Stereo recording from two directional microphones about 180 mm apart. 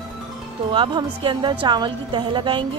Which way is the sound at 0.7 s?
25° right (ahead or behind).